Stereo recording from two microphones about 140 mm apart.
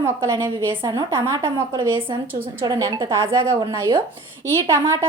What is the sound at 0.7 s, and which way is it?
Speech, 35° right (ahead or behind).